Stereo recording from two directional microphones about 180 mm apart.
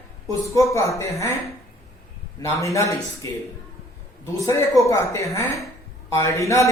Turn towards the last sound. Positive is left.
turn(degrees=15)  # may be behind; listen again after turning